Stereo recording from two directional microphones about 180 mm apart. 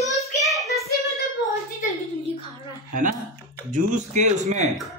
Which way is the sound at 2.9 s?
50° right (ahead or behind).